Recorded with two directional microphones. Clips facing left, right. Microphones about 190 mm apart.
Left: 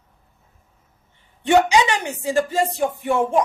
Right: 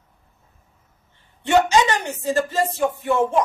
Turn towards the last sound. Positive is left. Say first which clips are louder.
# even
turn(degrees=15)  # may be behind; listen again after turning